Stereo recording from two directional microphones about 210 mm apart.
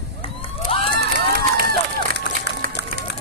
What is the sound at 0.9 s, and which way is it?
Crowd, 50° right (ahead or behind).